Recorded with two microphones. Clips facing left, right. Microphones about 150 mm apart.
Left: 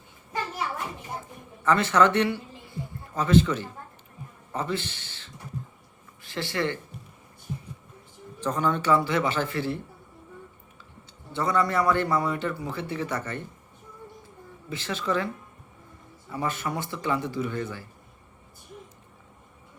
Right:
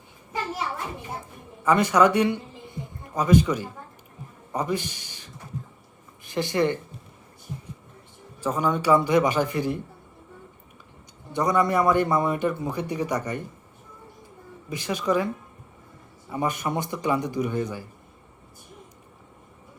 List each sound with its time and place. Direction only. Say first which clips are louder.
1.6 s a woman's voice: right 2 dB; 15° right (ahead or behind)
8.4 s speech: right 1 dB; 10° right (ahead or behind)
11.3 s speech: right 3 dB; 15° right (ahead or behind)
14.7 s speech: right 4 dB; 15° right (ahead or behind)
16.3 s speech: right 3 dB; 15° right (ahead or behind)